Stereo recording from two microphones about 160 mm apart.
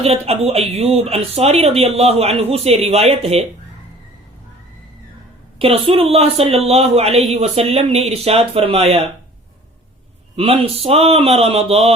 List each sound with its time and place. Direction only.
0.0 s speech: 40° right (ahead or behind)
5.5 s speech: 35° right (ahead or behind)
10.3 s speech: 35° right (ahead or behind)